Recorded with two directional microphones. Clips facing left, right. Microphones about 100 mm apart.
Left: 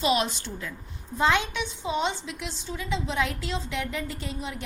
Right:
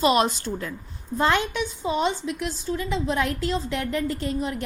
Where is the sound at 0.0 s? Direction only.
50° right (ahead or behind).